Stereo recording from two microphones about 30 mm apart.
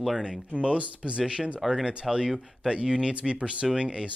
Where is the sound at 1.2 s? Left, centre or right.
Right.